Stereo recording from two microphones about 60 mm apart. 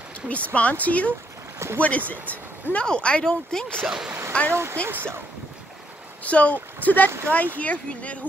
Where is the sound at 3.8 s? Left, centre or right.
Centre.